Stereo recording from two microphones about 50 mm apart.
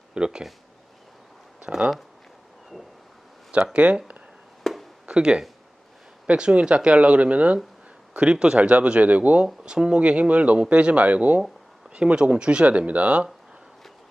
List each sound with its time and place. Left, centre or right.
0.1 s speech: centre
1.7 s speech: centre
3.7 s speech: right
4.6 s a sound: centre
5.0 s speech: centre